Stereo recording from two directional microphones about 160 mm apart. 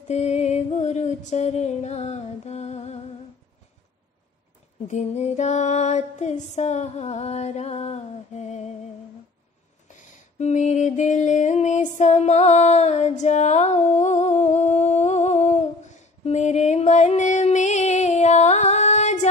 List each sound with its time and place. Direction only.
0.1 s music: 45° left (ahead or behind)
4.8 s music: 45° left (ahead or behind)
9.8 s lullaby: 50° left (ahead or behind)